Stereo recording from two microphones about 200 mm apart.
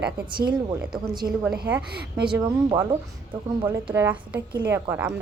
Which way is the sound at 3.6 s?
10° right (ahead or behind).